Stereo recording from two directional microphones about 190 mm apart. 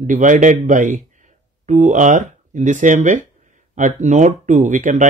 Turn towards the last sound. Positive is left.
turn(degrees=-40)  # may be behind; listen again after turning